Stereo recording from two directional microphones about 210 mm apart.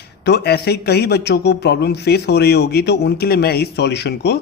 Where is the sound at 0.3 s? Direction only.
50° left (ahead or behind).